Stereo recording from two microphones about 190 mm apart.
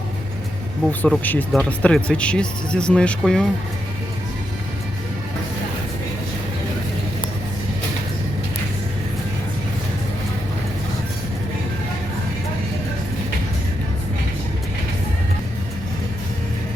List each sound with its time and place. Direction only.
0.9 s speech: 5° left (ahead or behind)